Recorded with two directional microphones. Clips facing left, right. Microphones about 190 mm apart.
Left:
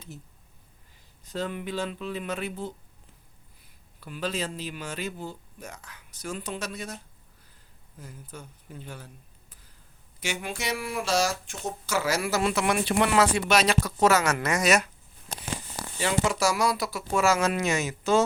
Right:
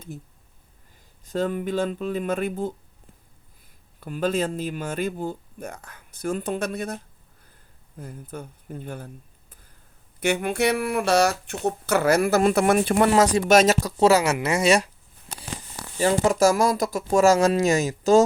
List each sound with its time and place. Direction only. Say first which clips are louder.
1.3 s speech: right 7 dB; 45° right (ahead or behind)
4.0 s speech: right 7 dB; 50° right (ahead or behind)
10.2 s speech: right 11 dB; 60° right (ahead or behind)
14.4 s speech: right 4 dB; 30° right (ahead or behind)
16.0 s speech: right 7 dB; 40° right (ahead or behind)